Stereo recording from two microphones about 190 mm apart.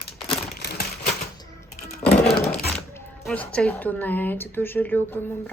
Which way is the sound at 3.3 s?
5° left (ahead or behind).